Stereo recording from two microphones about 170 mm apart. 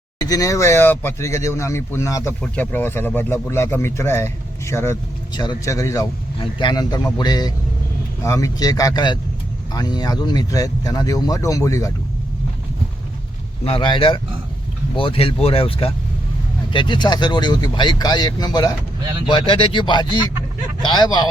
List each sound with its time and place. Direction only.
0.2 s speech: 20° left (ahead or behind)
13.7 s speech: 30° left (ahead or behind)